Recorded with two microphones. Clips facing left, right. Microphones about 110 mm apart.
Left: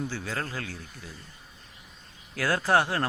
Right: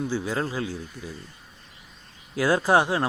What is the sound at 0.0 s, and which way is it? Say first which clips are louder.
Speech: right 6 dB; 15° right (ahead or behind).